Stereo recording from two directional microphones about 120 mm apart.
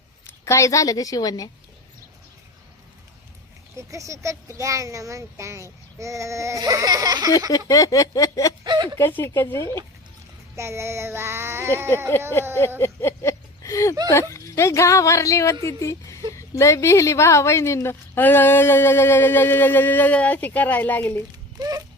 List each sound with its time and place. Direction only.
0.4 s speech: 25° left (ahead or behind)
3.8 s child singing: 25° right (ahead or behind)
7.7 s speech: 30° left (ahead or behind)
8.6 s speech: 40° right (ahead or behind)
9.0 s speech: 20° left (ahead or behind)
10.5 s child singing: 25° right (ahead or behind)
12.8 s a sound: 20° left (ahead or behind)
14.1 s speech: 25° left (ahead or behind)
21.6 s a sound: 35° right (ahead or behind)